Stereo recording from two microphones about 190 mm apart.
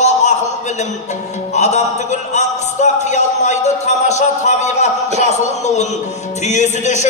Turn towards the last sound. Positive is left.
turn(degrees=40)  # may be behind; listen again after turning